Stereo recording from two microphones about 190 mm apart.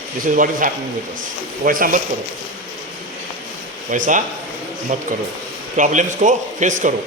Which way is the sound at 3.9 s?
45° right (ahead or behind).